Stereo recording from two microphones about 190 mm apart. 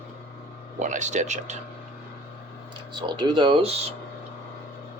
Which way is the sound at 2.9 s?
25° right (ahead or behind).